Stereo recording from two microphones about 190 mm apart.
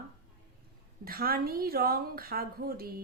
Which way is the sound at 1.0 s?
50° right (ahead or behind).